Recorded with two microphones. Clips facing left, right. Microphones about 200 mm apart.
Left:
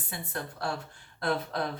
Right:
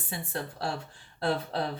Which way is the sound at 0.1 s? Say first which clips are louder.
Right 2 dB; 30° right (ahead or behind).